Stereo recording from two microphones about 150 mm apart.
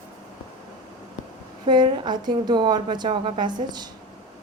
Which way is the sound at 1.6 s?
30° right (ahead or behind).